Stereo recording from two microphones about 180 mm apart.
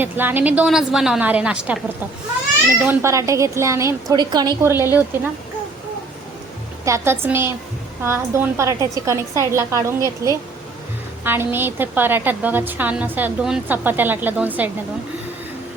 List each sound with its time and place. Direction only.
0.0 s a woman's voice: 10° right (ahead or behind)
2.8 s a woman's voice: 10° right (ahead or behind)
6.8 s a woman's voice: 15° right (ahead or behind)